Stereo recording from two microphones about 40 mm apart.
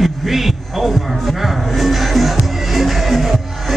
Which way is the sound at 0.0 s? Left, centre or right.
Centre.